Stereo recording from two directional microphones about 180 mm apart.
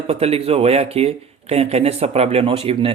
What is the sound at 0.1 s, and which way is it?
Speech, 35° right (ahead or behind).